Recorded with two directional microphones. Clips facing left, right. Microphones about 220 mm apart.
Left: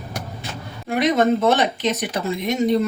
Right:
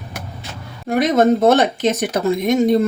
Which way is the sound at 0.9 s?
45° right (ahead or behind).